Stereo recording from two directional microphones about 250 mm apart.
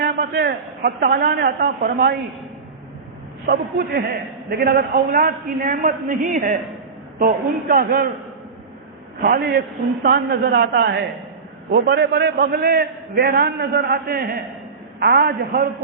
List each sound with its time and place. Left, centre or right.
0.0 s a man's voice: right
3.4 s a man's voice: right
9.2 s a man's voice: right